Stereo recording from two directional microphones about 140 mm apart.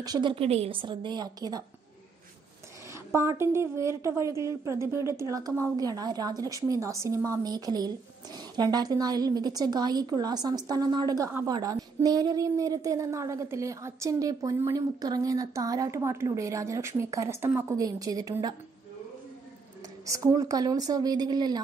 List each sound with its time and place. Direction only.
0.0 s a woman's voice: 30° right (ahead or behind)
2.9 s a woman's voice: 20° right (ahead or behind)
20.1 s a woman's voice: 25° right (ahead or behind)